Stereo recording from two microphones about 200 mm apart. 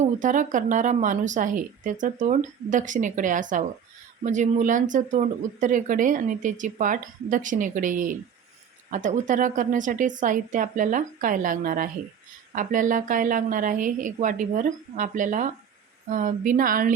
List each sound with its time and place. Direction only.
0.0 s speech: 40° right (ahead or behind)